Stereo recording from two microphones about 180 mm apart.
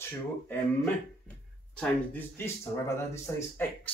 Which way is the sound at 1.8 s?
10° left (ahead or behind).